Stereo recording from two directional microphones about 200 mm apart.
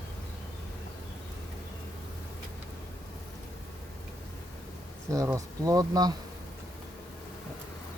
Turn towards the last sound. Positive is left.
turn(degrees=-20)  # may be behind; listen again after turning